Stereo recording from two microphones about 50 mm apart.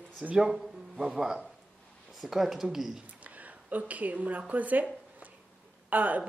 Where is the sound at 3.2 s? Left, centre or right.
Right.